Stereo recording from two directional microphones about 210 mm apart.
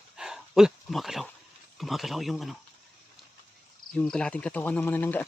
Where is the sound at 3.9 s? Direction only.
5° left (ahead or behind).